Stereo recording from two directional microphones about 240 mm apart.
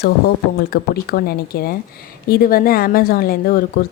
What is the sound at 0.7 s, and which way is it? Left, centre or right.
A woman's voice, left.